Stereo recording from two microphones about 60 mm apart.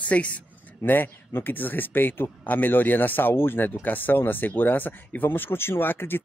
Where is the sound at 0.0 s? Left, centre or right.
Left.